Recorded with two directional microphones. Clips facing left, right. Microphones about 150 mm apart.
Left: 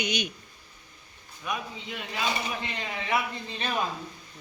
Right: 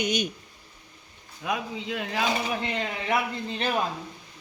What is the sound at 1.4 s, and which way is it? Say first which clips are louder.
Speech: right 4 dB; 90° right.